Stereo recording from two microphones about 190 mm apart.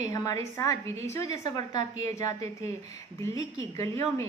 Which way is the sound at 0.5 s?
15° left (ahead or behind).